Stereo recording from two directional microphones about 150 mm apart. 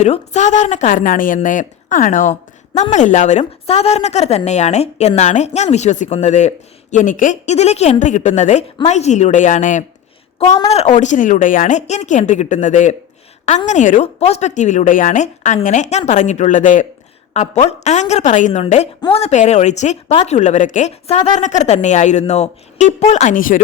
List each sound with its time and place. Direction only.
0.0 s a woman's voice: 50° left (ahead or behind)